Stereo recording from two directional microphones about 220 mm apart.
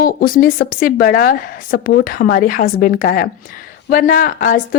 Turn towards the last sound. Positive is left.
turn(degrees=40)  # may be behind; listen again after turning